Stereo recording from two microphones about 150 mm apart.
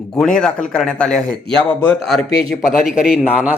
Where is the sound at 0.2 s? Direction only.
5° left (ahead or behind).